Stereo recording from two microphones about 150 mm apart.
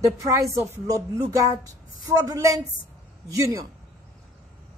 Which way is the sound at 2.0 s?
20° right (ahead or behind).